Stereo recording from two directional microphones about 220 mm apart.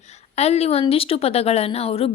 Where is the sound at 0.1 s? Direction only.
30° left (ahead or behind).